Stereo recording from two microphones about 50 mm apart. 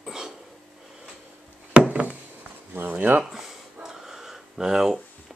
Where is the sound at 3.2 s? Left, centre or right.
Centre.